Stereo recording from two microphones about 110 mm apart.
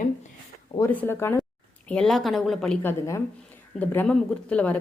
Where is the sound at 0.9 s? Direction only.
20° left (ahead or behind).